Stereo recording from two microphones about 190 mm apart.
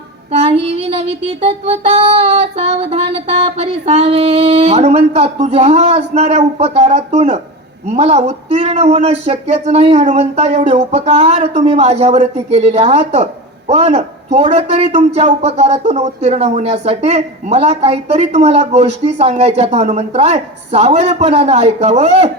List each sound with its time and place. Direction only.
0.3 s speech: 35° right (ahead or behind)